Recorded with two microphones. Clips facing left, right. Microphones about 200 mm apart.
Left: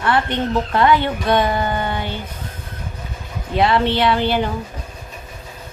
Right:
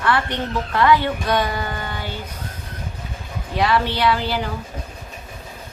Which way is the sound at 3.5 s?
25° left (ahead or behind).